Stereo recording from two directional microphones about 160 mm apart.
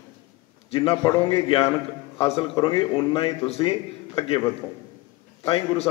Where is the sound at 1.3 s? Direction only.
35° left (ahead or behind).